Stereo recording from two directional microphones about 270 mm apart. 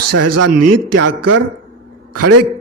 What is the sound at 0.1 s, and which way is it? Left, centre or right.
A man's voice, right.